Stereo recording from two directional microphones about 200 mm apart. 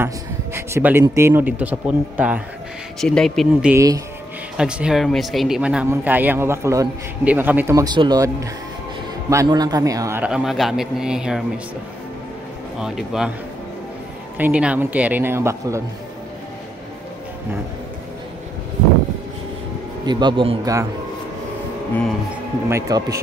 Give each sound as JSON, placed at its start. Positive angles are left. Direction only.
{"t": 0.6, "sound": "a man's voice", "side_deg": -10}
{"t": 3.7, "sound": "speech", "side_deg": -15}
{"t": 4.6, "sound": "a man's voice", "side_deg": -5}
{"t": 12.8, "sound": "a man's voice", "side_deg": -5}
{"t": 14.4, "sound": "speech", "side_deg": -5}
{"t": 20.1, "sound": "a man's voice", "side_deg": -20}
{"t": 22.7, "sound": "speech", "side_deg": -15}